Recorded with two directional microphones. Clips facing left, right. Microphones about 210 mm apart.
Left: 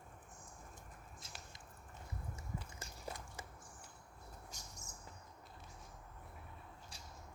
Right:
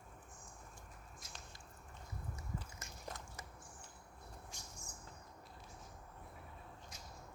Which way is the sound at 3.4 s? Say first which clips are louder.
Left 2 dB; 30° left (ahead or behind).